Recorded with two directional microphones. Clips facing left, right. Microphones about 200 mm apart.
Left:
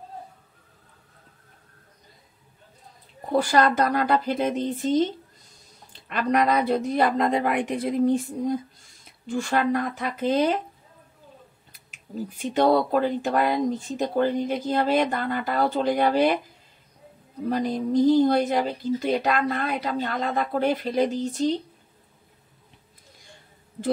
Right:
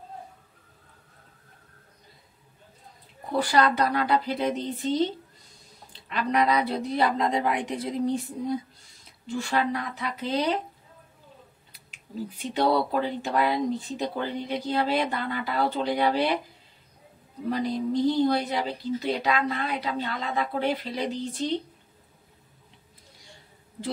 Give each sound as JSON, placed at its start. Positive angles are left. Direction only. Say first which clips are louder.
{"t": 3.3, "sound": "speech", "louder": "left 3 dB", "side_deg": 45}
{"t": 12.5, "sound": "speech", "louder": "left 4 dB", "side_deg": 45}
{"t": 17.5, "sound": "speech", "louder": "left 2 dB", "side_deg": 45}